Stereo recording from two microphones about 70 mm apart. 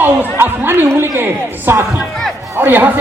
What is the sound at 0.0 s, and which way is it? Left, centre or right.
A man's voice, right.